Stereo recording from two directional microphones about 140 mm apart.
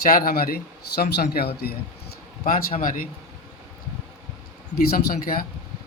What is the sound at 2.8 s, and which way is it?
Speech, 75° left (ahead or behind).